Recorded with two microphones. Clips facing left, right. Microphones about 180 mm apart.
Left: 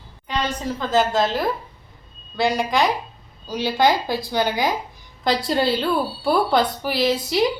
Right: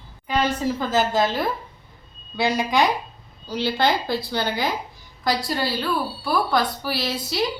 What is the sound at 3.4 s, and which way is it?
A woman's voice, 15° left (ahead or behind).